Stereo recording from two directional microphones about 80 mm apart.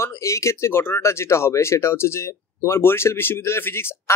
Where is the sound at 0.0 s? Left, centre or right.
Left.